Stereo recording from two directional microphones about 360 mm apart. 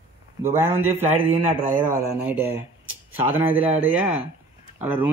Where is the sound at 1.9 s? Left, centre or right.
Centre.